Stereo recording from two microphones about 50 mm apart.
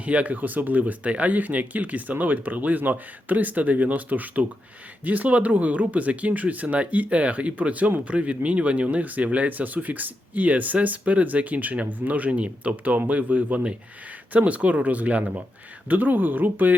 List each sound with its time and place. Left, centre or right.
0.0 s speech: right